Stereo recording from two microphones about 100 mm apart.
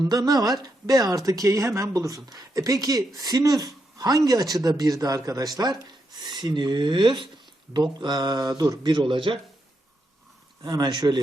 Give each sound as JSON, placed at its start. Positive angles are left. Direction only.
{"t": 0.0, "sound": "speech", "side_deg": -40}
{"t": 10.6, "sound": "speech", "side_deg": -40}